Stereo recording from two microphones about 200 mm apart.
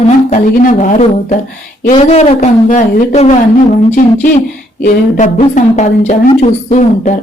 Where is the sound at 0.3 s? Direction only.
40° left (ahead or behind).